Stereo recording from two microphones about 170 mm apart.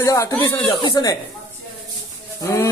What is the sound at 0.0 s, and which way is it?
Speech, 20° left (ahead or behind).